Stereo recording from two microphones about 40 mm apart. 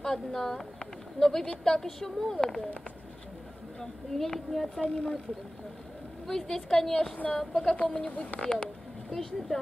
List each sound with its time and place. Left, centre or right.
0.0 s speech: centre
3.8 s a woman's voice: centre
4.8 s speech: left
6.2 s speech: centre
8.0 s speech: left
9.1 s a woman's voice: centre